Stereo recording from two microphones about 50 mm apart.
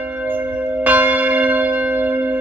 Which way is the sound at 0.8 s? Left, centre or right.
Right.